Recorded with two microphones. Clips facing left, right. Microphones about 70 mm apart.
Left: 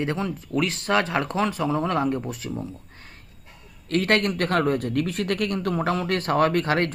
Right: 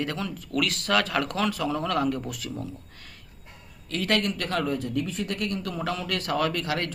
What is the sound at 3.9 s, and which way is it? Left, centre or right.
Speech, left.